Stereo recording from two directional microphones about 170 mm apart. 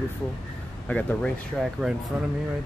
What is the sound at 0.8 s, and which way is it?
Speech, 5° left (ahead or behind).